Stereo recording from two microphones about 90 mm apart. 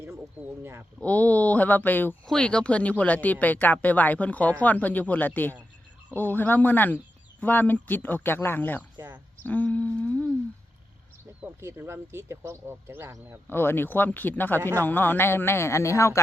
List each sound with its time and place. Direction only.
0.6 s speech: 30° right (ahead or behind)
0.9 s speech: 15° left (ahead or behind)
2.2 s speech: 10° left (ahead or behind)
11.6 s speech: 30° right (ahead or behind)
13.5 s speech: 25° left (ahead or behind)